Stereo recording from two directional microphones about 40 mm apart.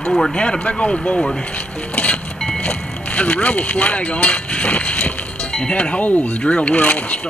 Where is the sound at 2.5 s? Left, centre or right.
Left.